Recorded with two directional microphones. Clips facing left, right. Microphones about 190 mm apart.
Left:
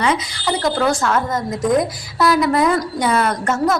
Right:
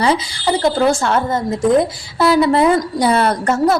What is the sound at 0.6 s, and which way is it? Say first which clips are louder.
A woman's voice: right 3 dB; 25° right (ahead or behind).